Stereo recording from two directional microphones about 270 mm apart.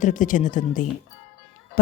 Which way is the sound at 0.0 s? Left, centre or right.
Left.